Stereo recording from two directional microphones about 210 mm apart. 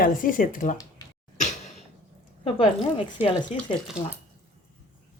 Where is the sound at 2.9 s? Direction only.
25° left (ahead or behind).